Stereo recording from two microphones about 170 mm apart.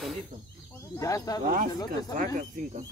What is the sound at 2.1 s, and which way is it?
Speech, 50° right (ahead or behind).